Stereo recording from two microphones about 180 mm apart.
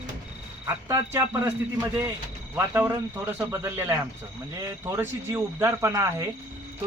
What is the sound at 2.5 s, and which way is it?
Speech, 10° right (ahead or behind).